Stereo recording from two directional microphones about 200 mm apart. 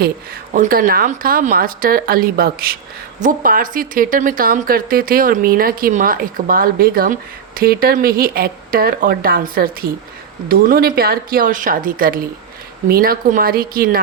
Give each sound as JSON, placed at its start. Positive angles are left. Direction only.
{"t": 0.5, "sound": "speech", "side_deg": -45}